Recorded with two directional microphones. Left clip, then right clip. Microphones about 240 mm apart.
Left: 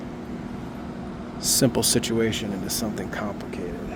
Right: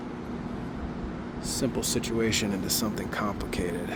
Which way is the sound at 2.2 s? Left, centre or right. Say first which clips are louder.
Left 1 dB; centre.